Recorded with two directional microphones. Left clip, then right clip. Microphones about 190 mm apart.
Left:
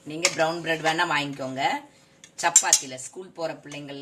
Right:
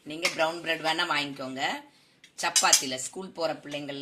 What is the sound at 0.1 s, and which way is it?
Speech, 30° right (ahead or behind).